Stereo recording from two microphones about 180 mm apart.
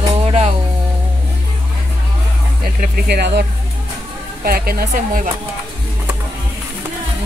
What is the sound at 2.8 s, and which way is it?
A woman's voice, 60° right (ahead or behind).